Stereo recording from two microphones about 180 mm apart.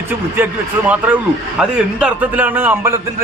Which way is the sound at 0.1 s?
10° right (ahead or behind).